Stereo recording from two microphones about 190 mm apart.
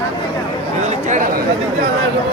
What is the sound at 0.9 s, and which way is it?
Speech, 40° right (ahead or behind).